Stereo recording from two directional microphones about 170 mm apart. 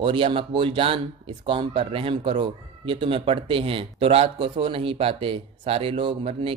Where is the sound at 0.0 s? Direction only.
30° right (ahead or behind).